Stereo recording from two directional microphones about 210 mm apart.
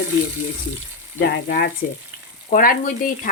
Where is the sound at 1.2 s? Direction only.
45° left (ahead or behind).